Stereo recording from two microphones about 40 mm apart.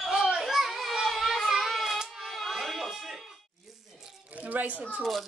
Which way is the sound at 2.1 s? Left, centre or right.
Centre.